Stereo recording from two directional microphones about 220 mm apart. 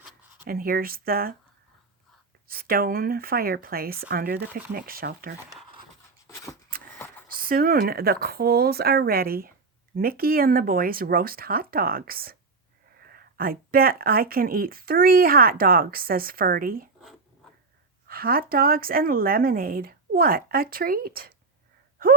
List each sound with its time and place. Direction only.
0.4 s speech: 40° right (ahead or behind)
2.5 s speech: 40° right (ahead or behind)
6.2 s a sound: 15° left (ahead or behind)
7.3 s speech: 40° right (ahead or behind)
18.1 s speech: 40° right (ahead or behind)